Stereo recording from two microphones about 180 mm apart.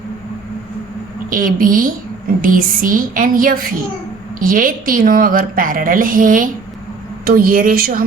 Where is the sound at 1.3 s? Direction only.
50° right (ahead or behind).